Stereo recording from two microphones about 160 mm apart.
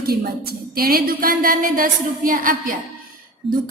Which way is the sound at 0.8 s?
65° right (ahead or behind).